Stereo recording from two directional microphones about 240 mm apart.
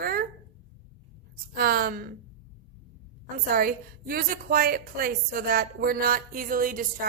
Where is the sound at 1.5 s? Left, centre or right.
Right.